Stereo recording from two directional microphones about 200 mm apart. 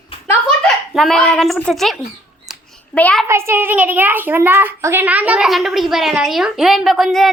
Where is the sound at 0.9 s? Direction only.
Centre (ahead or behind).